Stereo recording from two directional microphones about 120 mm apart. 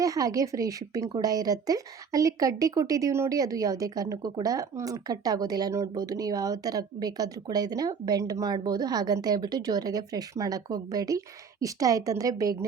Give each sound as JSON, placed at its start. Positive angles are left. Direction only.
{"t": 0.0, "sound": "a woman's voice", "side_deg": -30}